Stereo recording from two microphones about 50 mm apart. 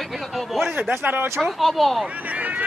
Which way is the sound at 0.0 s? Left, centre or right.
Centre.